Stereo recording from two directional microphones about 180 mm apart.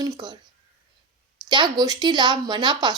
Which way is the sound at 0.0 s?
20° right (ahead or behind).